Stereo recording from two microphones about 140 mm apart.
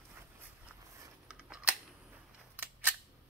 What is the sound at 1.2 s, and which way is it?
Scissors, 5° right (ahead or behind).